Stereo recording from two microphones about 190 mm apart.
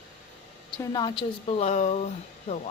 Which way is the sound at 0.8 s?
20° left (ahead or behind).